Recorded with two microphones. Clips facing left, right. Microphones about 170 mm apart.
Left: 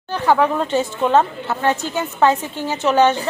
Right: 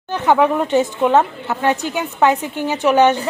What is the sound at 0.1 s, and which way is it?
A woman's voice, 20° right (ahead or behind).